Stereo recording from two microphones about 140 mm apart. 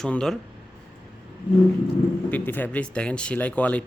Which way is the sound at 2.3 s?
15° left (ahead or behind).